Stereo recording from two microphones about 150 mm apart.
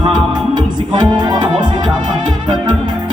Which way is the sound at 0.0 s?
30° right (ahead or behind).